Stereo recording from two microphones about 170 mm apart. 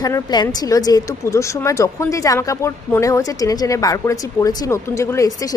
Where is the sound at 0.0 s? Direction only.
25° left (ahead or behind).